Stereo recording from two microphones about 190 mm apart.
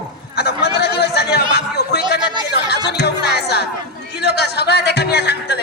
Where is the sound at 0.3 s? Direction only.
60° left (ahead or behind).